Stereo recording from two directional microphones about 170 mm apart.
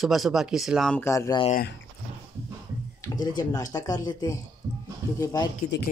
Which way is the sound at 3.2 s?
20° left (ahead or behind).